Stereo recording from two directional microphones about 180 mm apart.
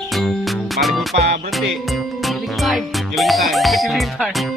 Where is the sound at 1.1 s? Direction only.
35° right (ahead or behind).